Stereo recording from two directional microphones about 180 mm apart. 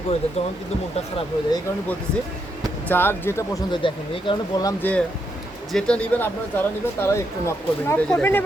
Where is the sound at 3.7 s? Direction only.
25° left (ahead or behind).